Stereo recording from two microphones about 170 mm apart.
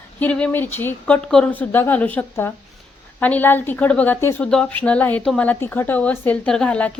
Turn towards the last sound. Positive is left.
turn(degrees=5)  # may be behind; listen again after turning